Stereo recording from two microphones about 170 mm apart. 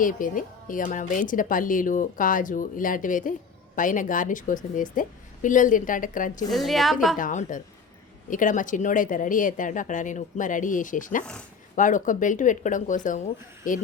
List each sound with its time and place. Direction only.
0.0 s speech: 55° left (ahead or behind)
6.5 s a woman's voice: centre (ahead or behind)
7.2 s speech: 50° left (ahead or behind)